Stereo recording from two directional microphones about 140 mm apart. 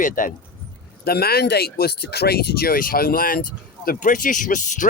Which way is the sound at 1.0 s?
90° left.